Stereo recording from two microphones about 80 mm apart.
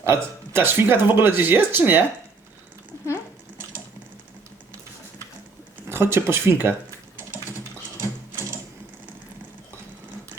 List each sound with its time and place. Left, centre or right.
0.0 s speech: right
5.9 s speech: right